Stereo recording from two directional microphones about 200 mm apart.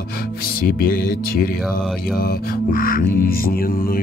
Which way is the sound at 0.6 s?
50° left (ahead or behind).